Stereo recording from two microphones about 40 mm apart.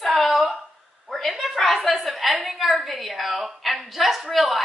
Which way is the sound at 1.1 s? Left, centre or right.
Centre.